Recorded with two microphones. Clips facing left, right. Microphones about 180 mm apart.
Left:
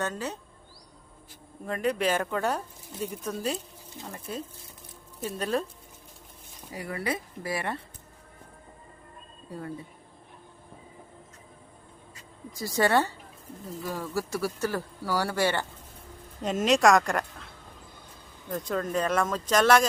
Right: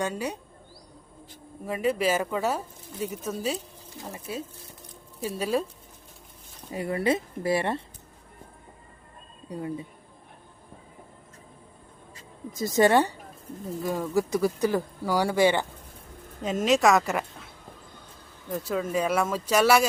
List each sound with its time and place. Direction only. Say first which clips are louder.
0.0 s speech: right 2 dB; 10° right (ahead or behind)
1.6 s speech: right 2 dB; 5° right (ahead or behind)
6.7 s speech: right 7 dB; 25° right (ahead or behind)
9.5 s speech: right 4 dB; 15° right (ahead or behind)
12.5 s speech: right 4 dB; 20° right (ahead or behind)
16.4 s speech: even; centre (ahead or behind)
18.5 s speech: right 1 dB; 5° right (ahead or behind)